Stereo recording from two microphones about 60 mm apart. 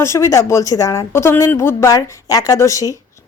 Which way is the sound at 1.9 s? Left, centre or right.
Left.